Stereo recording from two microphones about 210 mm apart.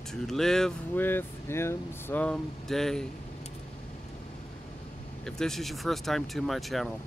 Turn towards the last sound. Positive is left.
turn(degrees=0)  # may be behind; listen again after turning